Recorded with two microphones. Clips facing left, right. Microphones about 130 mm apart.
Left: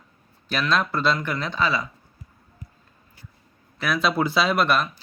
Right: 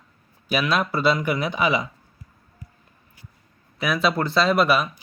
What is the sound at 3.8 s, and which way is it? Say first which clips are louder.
Speech: right 1 dB; centre (ahead or behind).